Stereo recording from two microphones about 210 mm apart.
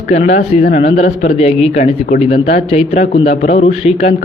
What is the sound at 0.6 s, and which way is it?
Speech, 50° left (ahead or behind).